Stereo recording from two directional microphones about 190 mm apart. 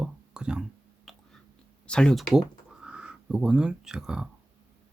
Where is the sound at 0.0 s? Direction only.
5° right (ahead or behind).